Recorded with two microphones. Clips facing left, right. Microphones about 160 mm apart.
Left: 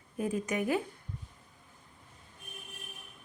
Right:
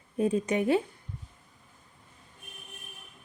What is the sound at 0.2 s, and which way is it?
Speech, 30° right (ahead or behind).